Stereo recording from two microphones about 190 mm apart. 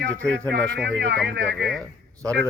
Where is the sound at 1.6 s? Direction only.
Centre (ahead or behind).